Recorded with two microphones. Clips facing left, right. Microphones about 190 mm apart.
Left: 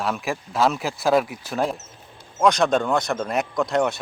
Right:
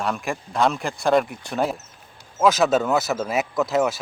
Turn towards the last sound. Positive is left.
turn(degrees=0)  # may be behind; listen again after turning